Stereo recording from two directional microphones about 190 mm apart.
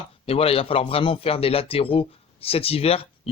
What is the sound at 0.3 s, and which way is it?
A man's voice, 30° left (ahead or behind).